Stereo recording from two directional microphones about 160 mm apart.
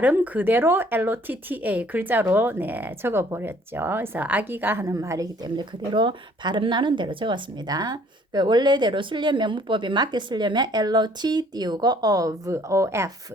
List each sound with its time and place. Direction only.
0.0 s speech: 10° right (ahead or behind)